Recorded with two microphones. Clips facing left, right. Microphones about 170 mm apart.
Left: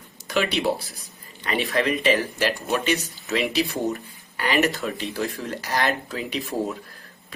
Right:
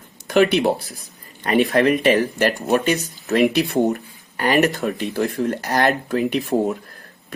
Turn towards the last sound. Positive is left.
turn(degrees=-55)  # may be behind; listen again after turning